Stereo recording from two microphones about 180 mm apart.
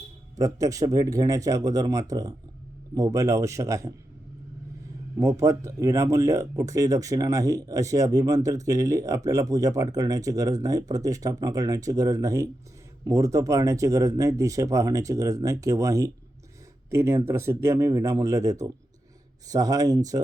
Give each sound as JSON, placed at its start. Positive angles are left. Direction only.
{"t": 0.3, "sound": "speech", "side_deg": -20}
{"t": 5.1, "sound": "speech", "side_deg": -15}